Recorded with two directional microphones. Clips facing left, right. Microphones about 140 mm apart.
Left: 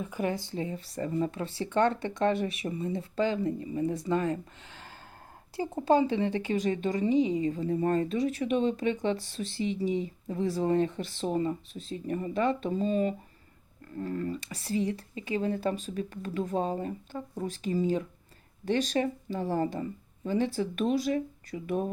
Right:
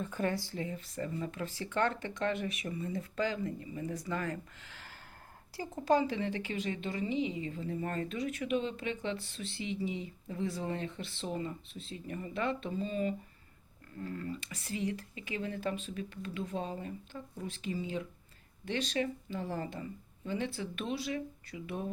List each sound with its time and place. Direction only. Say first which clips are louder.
0.0 s a woman's voice: left 3 dB; 15° left (ahead or behind); by 21.8 s 45° left (ahead or behind)